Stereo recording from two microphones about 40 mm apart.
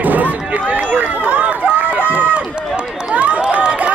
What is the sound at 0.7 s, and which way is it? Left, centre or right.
Run, right.